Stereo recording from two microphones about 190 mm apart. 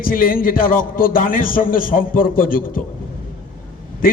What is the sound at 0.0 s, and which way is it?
A man's voice, 45° left (ahead or behind).